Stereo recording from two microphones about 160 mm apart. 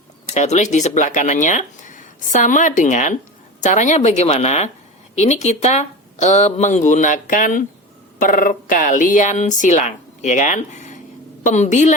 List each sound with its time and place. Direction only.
0.3 s speech: 45° left (ahead or behind)